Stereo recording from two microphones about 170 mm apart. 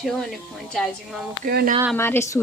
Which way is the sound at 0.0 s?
Centre (ahead or behind).